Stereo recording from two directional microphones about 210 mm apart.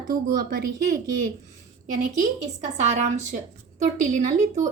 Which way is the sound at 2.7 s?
35° right (ahead or behind).